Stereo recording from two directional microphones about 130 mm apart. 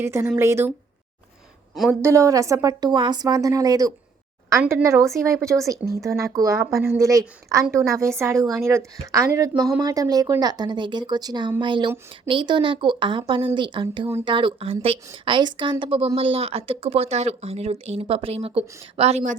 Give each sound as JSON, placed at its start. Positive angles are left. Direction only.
{"t": 0.0, "sound": "a woman's voice", "side_deg": -20}
{"t": 2.0, "sound": "a woman's voice", "side_deg": -20}